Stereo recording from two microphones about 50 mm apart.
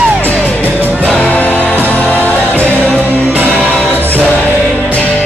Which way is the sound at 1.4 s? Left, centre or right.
Left.